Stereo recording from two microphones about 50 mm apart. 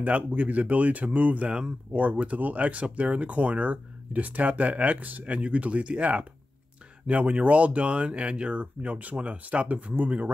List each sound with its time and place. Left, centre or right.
0.0 s speech: right